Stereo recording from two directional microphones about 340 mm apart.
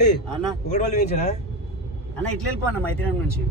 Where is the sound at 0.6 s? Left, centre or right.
Left.